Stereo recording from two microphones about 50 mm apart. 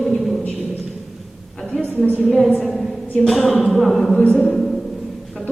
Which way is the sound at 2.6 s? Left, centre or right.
Centre.